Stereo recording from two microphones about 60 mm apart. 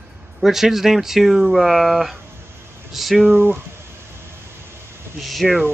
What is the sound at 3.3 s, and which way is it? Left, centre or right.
Speech, right.